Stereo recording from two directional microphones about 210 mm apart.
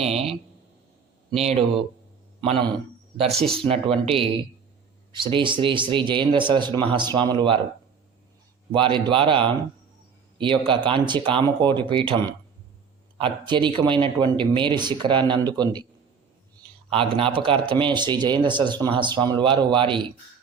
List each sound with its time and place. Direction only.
0.0 s a sound: 30° right (ahead or behind)
2.4 s speech: 25° right (ahead or behind)
3.3 s speech: centre (ahead or behind)
3.6 s speech: 25° right (ahead or behind)
8.7 s a man's voice: 25° right (ahead or behind)